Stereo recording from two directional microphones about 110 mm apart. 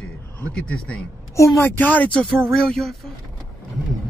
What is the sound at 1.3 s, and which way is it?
Speech, 30° left (ahead or behind).